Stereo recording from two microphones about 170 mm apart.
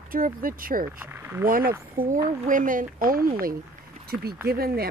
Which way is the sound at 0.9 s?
10° right (ahead or behind).